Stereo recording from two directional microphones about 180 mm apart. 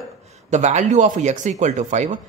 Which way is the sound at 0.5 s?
40° right (ahead or behind).